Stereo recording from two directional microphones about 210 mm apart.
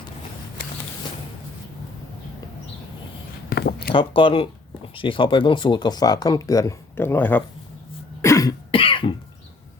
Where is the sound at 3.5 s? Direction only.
50° left (ahead or behind).